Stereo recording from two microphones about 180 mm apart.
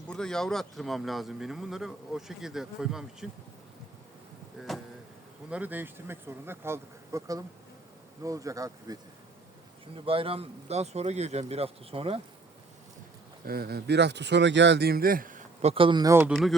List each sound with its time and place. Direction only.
0.1 s speech: 5° left (ahead or behind)
4.6 s speech: centre (ahead or behind); by 9.0 s 20° right (ahead or behind)
9.9 s speech: 30° right (ahead or behind)
13.4 s speech: 60° right (ahead or behind)
15.7 s speech: 30° right (ahead or behind)
16.3 s speech: centre (ahead or behind)